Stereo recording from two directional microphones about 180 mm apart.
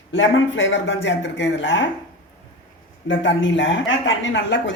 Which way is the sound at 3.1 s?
90° left.